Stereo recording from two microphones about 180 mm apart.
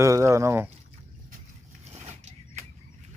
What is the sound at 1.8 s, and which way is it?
Pulleys, 40° right (ahead or behind).